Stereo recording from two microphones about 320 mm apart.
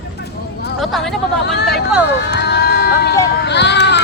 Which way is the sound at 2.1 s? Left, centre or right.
Left.